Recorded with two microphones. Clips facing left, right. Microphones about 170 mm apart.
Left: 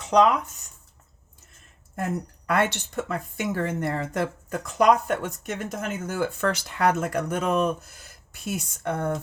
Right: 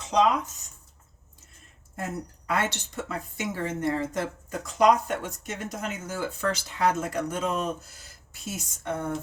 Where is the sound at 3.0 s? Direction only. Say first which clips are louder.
Left 2 dB; 55° left (ahead or behind).